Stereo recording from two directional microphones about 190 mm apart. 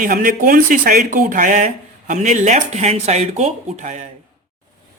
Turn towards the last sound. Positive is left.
turn(degrees=-40)  # may be behind; listen again after turning